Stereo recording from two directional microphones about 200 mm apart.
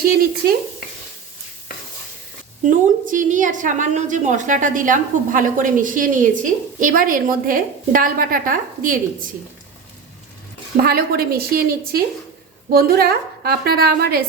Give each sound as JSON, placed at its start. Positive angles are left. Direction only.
{"t": 2.6, "sound": "a woman's voice", "side_deg": -40}
{"t": 10.8, "sound": "a woman's voice", "side_deg": -50}